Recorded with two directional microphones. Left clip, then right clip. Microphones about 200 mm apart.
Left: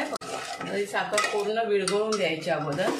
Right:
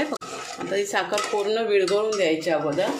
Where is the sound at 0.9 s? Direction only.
50° right (ahead or behind).